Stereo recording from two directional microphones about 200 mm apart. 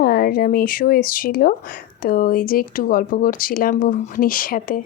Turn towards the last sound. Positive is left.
turn(degrees=45)  # may be behind; listen again after turning